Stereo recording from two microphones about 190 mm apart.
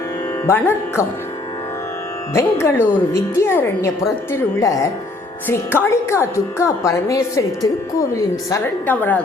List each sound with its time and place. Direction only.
0.4 s speech: 10° left (ahead or behind)
2.3 s speech: 15° left (ahead or behind)